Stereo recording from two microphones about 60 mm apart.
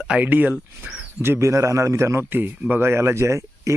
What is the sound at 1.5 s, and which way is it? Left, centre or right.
Speech, right.